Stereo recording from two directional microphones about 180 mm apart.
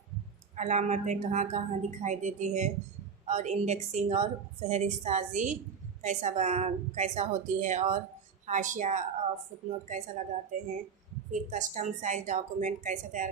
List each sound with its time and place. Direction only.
0.5 s a woman's voice: 40° right (ahead or behind)